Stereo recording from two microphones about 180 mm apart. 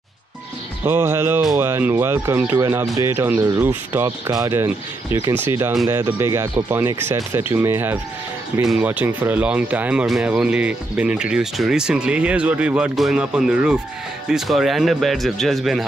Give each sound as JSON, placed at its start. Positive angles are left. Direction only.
{"t": 0.8, "sound": "speech", "side_deg": -15}